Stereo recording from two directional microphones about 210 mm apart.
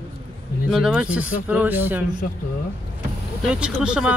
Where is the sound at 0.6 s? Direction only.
Centre (ahead or behind).